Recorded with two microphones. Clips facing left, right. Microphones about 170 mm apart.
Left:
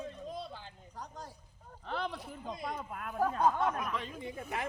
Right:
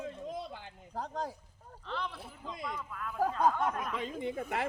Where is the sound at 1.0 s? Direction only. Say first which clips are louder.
Right 9 dB; 90° right.